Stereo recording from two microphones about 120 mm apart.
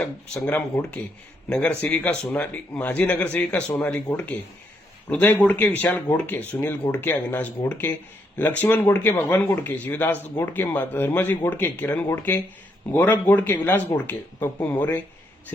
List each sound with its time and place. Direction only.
0.4 s speech: 15° left (ahead or behind)